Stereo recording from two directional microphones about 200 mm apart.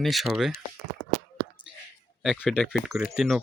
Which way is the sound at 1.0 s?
90° right.